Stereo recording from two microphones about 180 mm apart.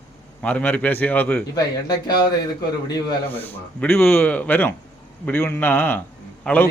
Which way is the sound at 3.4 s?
10° left (ahead or behind).